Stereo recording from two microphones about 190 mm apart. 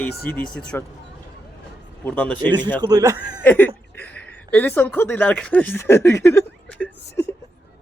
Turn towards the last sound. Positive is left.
turn(degrees=10)  # may be behind; listen again after turning